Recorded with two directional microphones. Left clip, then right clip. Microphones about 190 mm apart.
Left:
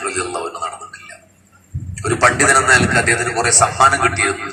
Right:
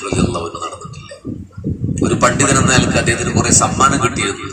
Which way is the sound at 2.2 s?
40° right (ahead or behind).